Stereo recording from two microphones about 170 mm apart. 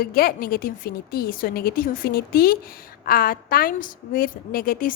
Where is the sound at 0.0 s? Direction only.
60° left (ahead or behind).